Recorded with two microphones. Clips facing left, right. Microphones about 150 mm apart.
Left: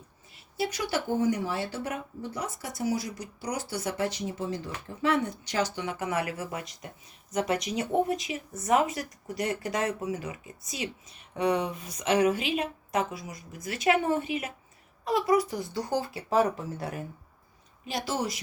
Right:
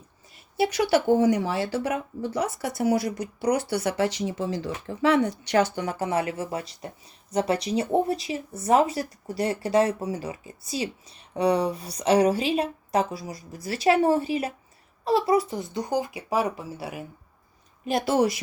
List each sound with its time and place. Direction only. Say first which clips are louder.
0.5 s speech: right 8 dB; 70° right (ahead or behind); by 17.1 s 10° right (ahead or behind)
17.8 s a woman's voice: right 9 dB; 55° right (ahead or behind)